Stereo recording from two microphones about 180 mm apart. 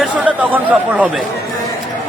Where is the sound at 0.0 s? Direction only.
5° right (ahead or behind).